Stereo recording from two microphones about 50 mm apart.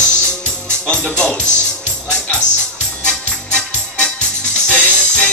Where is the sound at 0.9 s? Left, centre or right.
Left.